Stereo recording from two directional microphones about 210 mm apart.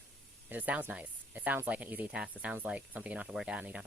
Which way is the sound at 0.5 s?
10° right (ahead or behind).